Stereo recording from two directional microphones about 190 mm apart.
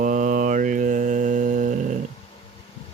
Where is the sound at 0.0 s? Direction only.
40° right (ahead or behind).